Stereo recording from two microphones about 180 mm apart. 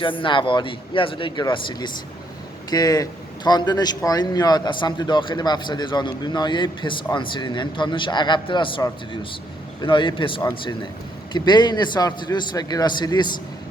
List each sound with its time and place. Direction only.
0.0 s speech: 30° left (ahead or behind)